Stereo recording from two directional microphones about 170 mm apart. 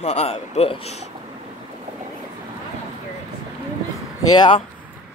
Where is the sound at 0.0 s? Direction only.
40° left (ahead or behind).